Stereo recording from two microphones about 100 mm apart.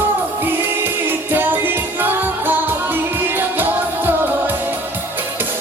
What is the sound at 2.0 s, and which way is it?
Music, 20° right (ahead or behind).